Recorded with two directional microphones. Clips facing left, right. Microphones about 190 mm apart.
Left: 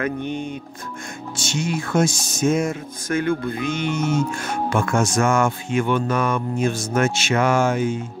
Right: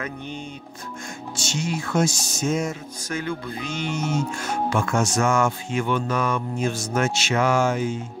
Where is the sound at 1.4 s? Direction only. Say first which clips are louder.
Left 3 dB; 55° left (ahead or behind).